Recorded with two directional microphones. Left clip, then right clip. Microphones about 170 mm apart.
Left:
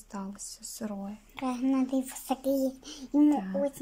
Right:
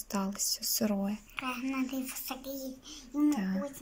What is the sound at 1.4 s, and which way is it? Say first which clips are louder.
A child's voice: left 6 dB; 40° left (ahead or behind).